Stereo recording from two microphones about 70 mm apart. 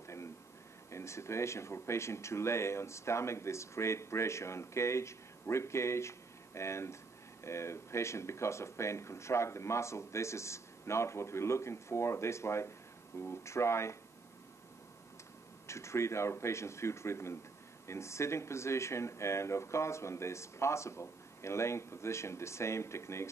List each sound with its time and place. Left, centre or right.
0.0 s a sound: left
0.9 s speech: left
15.6 s speech: left